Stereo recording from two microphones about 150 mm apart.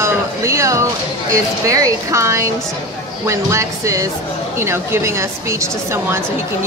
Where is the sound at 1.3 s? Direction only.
20° right (ahead or behind).